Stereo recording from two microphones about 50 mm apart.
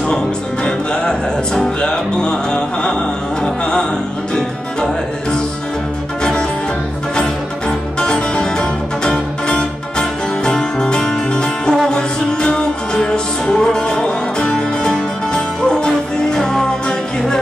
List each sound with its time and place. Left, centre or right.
0.7 s music: centre
4.4 s music: centre
7.2 s music: centre